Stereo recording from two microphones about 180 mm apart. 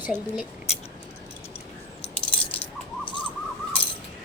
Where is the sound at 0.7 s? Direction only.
35° left (ahead or behind).